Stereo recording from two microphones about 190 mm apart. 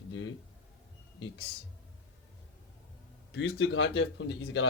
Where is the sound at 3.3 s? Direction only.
70° left (ahead or behind).